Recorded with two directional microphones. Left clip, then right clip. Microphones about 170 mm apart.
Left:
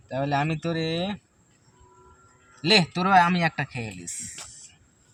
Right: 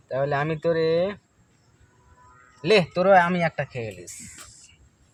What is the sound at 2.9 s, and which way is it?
Speech, 25° right (ahead or behind).